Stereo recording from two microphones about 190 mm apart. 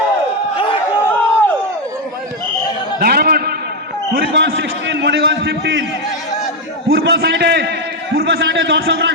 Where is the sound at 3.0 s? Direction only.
55° right (ahead or behind).